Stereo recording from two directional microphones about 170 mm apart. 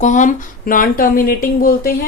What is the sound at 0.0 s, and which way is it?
Speech, 45° left (ahead or behind).